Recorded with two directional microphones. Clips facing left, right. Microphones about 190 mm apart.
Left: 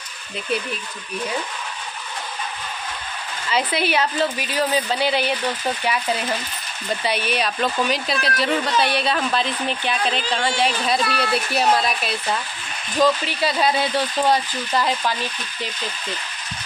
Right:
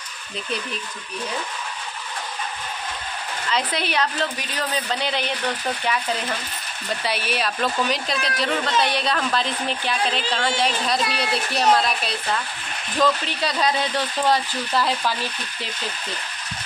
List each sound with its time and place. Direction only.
3.5 s a woman's voice: 5° left (ahead or behind)
7.1 s a woman's voice: 5° right (ahead or behind)
11.0 s speech: 20° right (ahead or behind)
11.5 s a woman's voice: 5° left (ahead or behind)